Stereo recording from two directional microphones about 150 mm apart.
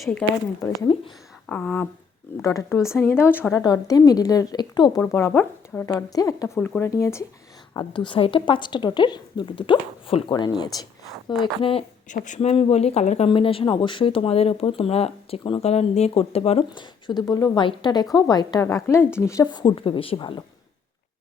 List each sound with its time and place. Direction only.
0.0 s speech: 5° left (ahead or behind)
2.4 s a woman's voice: 20° left (ahead or behind)
3.6 s a woman's voice: 25° left (ahead or behind)
5.1 s a woman's voice: 10° left (ahead or behind)
6.6 s a woman's voice: 10° left (ahead or behind)
7.7 s speech: 30° left (ahead or behind)
12.0 s a woman's voice: 55° left (ahead or behind); by 20.4 s 30° left (ahead or behind)